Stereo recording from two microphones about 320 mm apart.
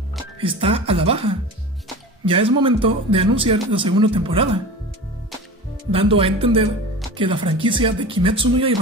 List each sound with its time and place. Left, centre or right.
0.4 s speech: centre
5.9 s speech: centre